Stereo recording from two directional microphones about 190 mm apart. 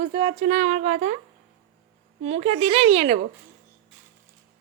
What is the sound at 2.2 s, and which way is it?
Speech, 35° right (ahead or behind).